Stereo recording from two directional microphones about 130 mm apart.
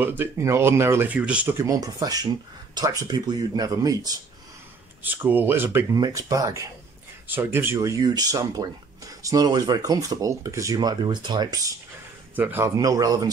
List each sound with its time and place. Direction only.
0.0 s speech: 15° right (ahead or behind)
1.6 s speech: 25° right (ahead or behind)
5.0 s speech: 15° right (ahead or behind)
5.9 s speech: 30° right (ahead or behind)
12.4 s speech: 15° right (ahead or behind)